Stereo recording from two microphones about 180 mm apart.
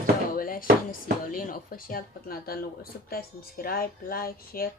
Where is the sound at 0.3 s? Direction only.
50° left (ahead or behind).